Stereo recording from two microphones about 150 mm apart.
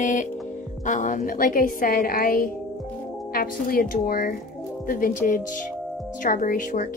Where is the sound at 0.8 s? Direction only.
60° left (ahead or behind).